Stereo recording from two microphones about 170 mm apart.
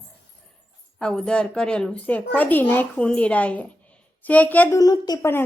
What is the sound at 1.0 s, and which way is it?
A woman's voice, 5° left (ahead or behind).